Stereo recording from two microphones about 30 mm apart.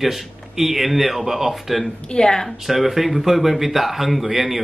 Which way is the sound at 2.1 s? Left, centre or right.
Left.